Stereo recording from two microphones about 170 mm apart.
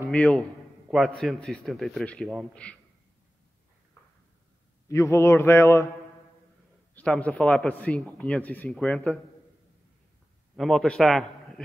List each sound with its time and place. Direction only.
0.1 s a man's voice: 5° left (ahead or behind)
4.8 s speech: 20° left (ahead or behind)
7.0 s speech: 10° left (ahead or behind)
10.5 s a man's voice: centre (ahead or behind)